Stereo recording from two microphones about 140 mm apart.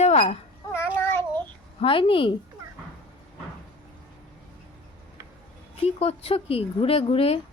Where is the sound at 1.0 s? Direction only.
15° left (ahead or behind).